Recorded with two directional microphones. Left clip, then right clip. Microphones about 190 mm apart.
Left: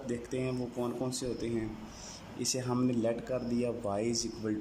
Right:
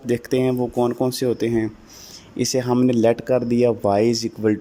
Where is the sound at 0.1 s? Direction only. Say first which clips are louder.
Right 16 dB; 45° right (ahead or behind).